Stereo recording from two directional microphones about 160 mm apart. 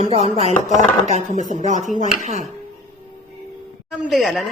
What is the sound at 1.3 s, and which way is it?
Speech, 50° left (ahead or behind).